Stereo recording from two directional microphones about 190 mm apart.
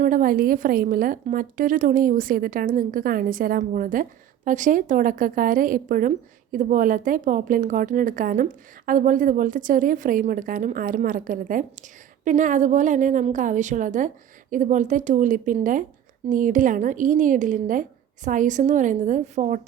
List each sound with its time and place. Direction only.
0.0 s a woman's voice: 45° right (ahead or behind)